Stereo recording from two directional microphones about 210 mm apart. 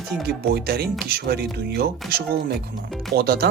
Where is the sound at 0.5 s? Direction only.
50° right (ahead or behind).